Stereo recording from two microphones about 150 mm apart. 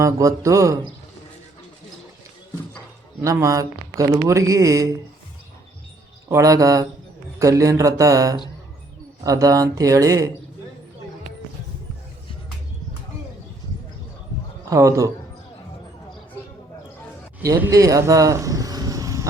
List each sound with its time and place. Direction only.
0.0 s speech: 20° right (ahead or behind)
3.2 s speech: 20° right (ahead or behind)
6.2 s speech: 20° right (ahead or behind)
14.7 s speech: 20° right (ahead or behind)
17.4 s vehicle: 20° right (ahead or behind)